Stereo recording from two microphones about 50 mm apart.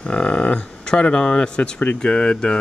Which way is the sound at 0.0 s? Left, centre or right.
Centre.